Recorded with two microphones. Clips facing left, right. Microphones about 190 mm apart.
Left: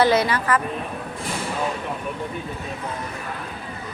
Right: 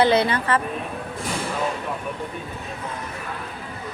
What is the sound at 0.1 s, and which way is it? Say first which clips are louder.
Speech: even; 30° right (ahead or behind).